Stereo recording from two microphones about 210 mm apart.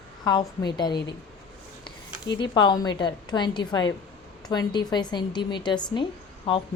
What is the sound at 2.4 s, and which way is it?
A woman's voice, 20° left (ahead or behind).